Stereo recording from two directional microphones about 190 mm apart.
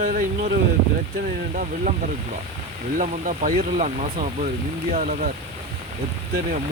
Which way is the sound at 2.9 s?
40° right (ahead or behind).